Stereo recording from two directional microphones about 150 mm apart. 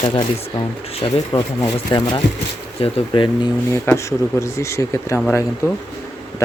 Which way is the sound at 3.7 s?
15° left (ahead or behind).